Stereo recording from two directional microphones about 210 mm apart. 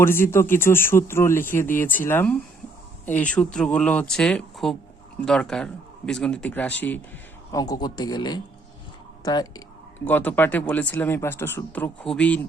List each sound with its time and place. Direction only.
0.0 s a man's voice: 10° left (ahead or behind)